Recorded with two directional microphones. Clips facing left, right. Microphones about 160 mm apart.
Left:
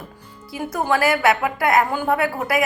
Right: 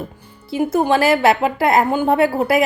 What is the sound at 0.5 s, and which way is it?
A woman's voice, 25° right (ahead or behind).